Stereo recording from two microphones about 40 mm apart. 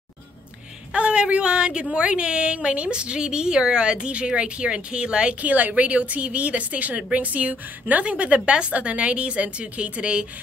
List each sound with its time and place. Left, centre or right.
0.9 s a woman's voice: right
5.4 s a woman's voice: right